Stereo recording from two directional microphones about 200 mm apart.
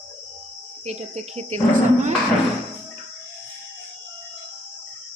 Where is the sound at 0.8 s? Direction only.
35° right (ahead or behind).